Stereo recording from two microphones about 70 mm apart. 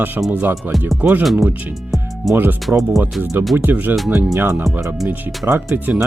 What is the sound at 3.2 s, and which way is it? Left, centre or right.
Speech, right.